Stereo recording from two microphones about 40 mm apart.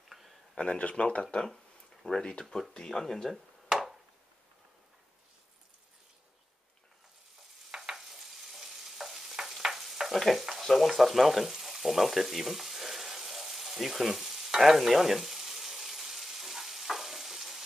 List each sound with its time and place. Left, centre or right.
0.6 s speech: left; by 3.3 s centre
7.7 s stir: centre
10.4 s frying: centre